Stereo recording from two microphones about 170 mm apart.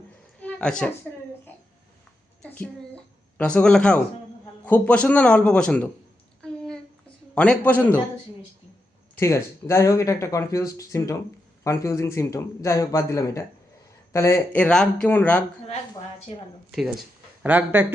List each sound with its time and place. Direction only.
0.4 s a woman's voice: 5° left (ahead or behind)
2.4 s a sound: 5° left (ahead or behind)
4.6 s speech: 10° left (ahead or behind)
7.3 s speech: 5° left (ahead or behind)
9.1 s speech: 15° left (ahead or behind)
17.4 s speech: 10° right (ahead or behind)